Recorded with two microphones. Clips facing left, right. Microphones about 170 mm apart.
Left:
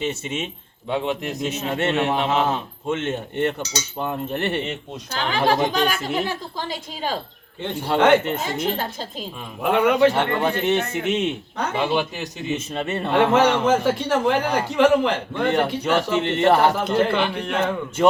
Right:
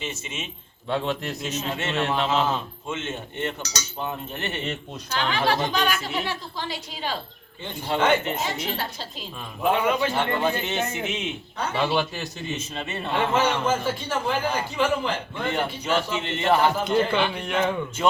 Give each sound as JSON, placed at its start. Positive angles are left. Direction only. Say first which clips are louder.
{"t": 0.0, "sound": "a man's voice", "louder": "left 8 dB", "side_deg": 60}
{"t": 0.9, "sound": "a man's voice", "louder": "left 2 dB", "side_deg": 15}
{"t": 1.5, "sound": "a man's voice", "louder": "left 6 dB", "side_deg": 60}
{"t": 2.0, "sound": "a man's voice", "louder": "even", "side_deg": 10}
{"t": 2.2, "sound": "a man's voice", "louder": "left 2 dB", "side_deg": 60}
{"t": 3.6, "sound": "cutlery", "louder": "left 5 dB", "side_deg": 25}
{"t": 4.0, "sound": "a man's voice", "louder": "left 6 dB", "side_deg": 55}
{"t": 5.3, "sound": "speech", "louder": "left 5 dB", "side_deg": 45}
{"t": 7.6, "sound": "a man's voice", "louder": "left 5 dB", "side_deg": 70}
{"t": 8.4, "sound": "speech", "louder": "left 5 dB", "side_deg": 50}
{"t": 9.6, "sound": "a man's voice", "louder": "left 5 dB", "side_deg": 65}
{"t": 11.8, "sound": "a man's voice", "louder": "left 1 dB", "side_deg": 15}
{"t": 12.5, "sound": "a man's voice", "louder": "left 6 dB", "side_deg": 55}
{"t": 16.8, "sound": "a man's voice", "louder": "left 2 dB", "side_deg": 5}